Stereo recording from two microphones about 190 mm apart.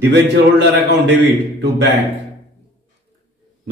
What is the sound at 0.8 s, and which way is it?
A man's voice, 65° right (ahead or behind).